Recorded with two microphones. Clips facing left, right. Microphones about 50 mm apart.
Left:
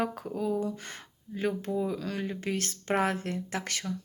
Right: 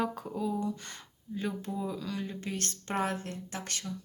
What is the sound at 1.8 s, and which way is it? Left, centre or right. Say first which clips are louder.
Speech: left 4 dB; left.